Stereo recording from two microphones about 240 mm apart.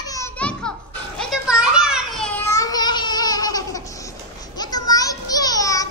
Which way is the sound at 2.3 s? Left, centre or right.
Centre.